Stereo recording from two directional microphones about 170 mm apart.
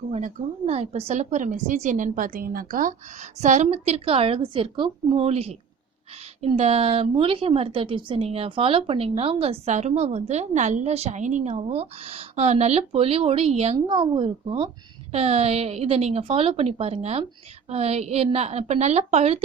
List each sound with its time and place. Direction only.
0.1 s a woman's voice: 40° right (ahead or behind)
13.7 s a woman's voice: 25° right (ahead or behind)